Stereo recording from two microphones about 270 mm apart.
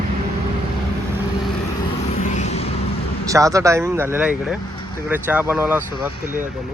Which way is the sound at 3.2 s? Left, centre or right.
Centre.